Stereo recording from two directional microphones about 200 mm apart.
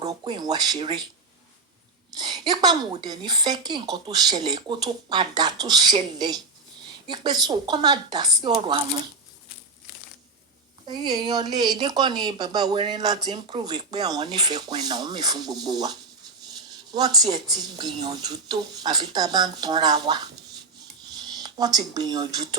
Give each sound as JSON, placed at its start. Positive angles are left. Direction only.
{"t": 0.0, "sound": "a woman's voice", "side_deg": -20}
{"t": 2.1, "sound": "a woman's voice", "side_deg": -20}
{"t": 7.4, "sound": "a woman's voice", "side_deg": -20}
{"t": 10.8, "sound": "a woman's voice", "side_deg": -20}
{"t": 16.9, "sound": "a woman's voice", "side_deg": -20}
{"t": 21.3, "sound": "speech", "side_deg": -20}